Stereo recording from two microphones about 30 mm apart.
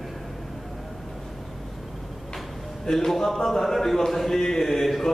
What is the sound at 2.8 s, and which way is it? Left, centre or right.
A man's voice, centre.